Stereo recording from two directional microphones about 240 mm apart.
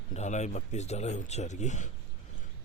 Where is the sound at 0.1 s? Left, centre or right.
Left.